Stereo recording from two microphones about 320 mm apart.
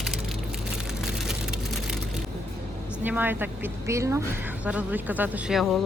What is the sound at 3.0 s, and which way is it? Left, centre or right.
A woman's voice, centre.